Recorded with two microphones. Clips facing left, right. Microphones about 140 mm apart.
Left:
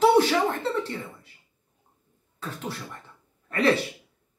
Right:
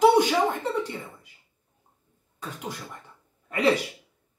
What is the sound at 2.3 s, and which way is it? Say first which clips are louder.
Speech: left 1 dB; 15° right (ahead or behind).